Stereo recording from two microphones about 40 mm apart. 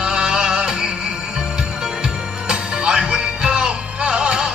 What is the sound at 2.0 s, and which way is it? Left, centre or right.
Music, centre.